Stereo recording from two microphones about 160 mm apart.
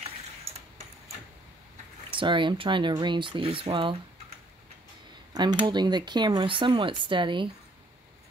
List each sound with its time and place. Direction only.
2.1 s speech: 30° right (ahead or behind)
5.3 s speech: 25° right (ahead or behind)